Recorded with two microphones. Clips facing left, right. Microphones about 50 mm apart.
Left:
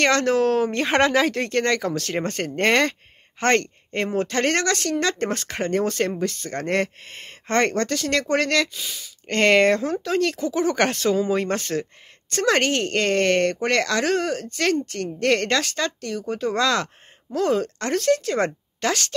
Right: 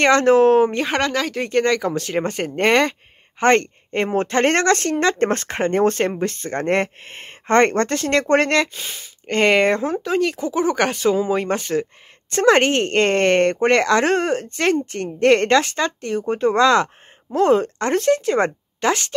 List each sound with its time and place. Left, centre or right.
0.0 s speech: right
0.7 s speech: centre
1.4 s speech: centre; by 9.1 s right
9.3 s speech: centre